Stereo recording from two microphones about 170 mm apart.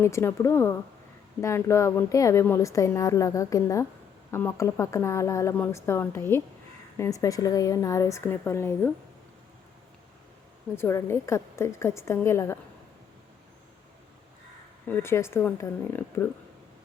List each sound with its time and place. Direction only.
0.0 s a woman's voice: 15° left (ahead or behind)
10.8 s a woman's voice: 15° left (ahead or behind)
14.8 s a woman's voice: 15° left (ahead or behind)